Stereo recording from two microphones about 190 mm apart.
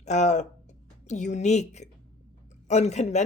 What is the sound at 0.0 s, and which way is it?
Speech, 35° left (ahead or behind).